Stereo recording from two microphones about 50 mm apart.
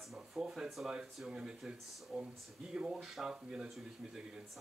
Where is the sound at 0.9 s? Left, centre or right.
Centre.